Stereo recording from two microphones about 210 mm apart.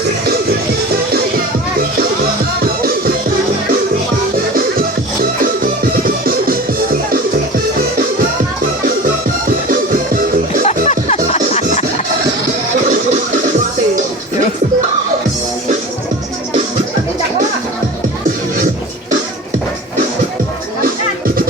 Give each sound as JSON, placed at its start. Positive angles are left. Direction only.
{"t": 10.7, "sound": "music", "side_deg": 30}